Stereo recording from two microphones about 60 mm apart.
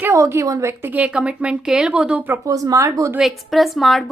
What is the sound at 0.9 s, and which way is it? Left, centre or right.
Speech, right.